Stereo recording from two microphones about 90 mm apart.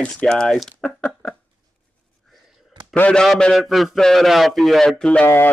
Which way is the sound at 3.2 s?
Centre (ahead or behind).